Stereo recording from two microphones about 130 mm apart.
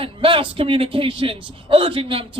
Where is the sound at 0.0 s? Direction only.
45° right (ahead or behind).